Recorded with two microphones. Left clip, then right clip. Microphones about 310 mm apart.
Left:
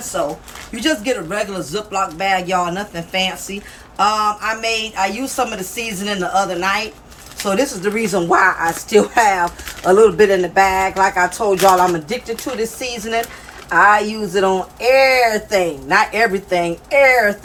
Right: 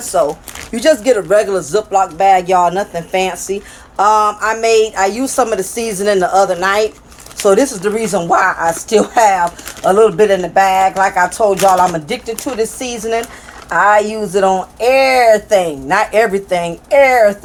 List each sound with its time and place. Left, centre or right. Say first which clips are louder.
0.8 s a woman's voice: right 8 dB; centre